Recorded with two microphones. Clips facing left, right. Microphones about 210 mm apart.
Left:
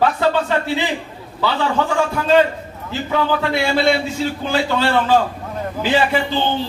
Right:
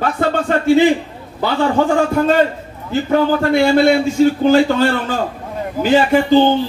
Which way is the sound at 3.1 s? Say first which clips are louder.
Right 5 dB; 45° right (ahead or behind).